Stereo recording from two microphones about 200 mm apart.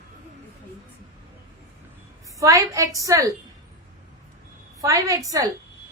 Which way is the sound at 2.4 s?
15° right (ahead or behind).